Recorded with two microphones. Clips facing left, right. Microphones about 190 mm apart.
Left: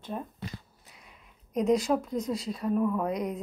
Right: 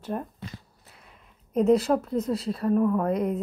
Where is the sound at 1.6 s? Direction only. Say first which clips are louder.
Right 4 dB; 5° right (ahead or behind).